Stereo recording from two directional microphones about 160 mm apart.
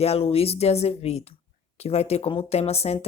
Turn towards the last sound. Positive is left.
turn(degrees=40)  # may be behind; listen again after turning